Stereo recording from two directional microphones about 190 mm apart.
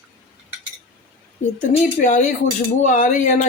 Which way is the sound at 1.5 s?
45° left (ahead or behind).